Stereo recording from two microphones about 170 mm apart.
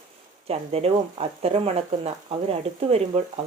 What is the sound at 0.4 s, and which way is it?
Speech, 35° right (ahead or behind).